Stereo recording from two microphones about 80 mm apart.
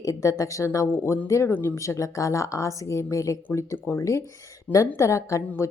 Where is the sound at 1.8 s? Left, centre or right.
Left.